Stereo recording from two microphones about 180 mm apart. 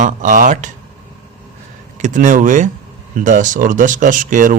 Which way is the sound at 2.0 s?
45° right (ahead or behind).